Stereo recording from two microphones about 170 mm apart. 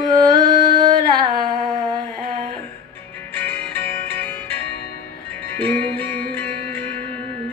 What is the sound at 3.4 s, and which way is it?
Music, 10° left (ahead or behind).